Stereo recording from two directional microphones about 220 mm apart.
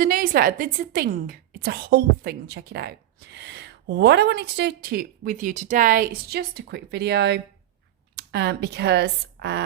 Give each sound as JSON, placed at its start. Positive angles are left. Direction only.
{"t": 0.0, "sound": "a woman's voice", "side_deg": -40}